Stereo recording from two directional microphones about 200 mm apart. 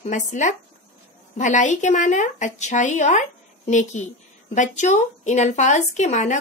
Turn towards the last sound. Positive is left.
turn(degrees=35)  # may be behind; listen again after turning